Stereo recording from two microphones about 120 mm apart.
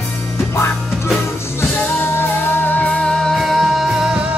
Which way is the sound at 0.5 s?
20° left (ahead or behind).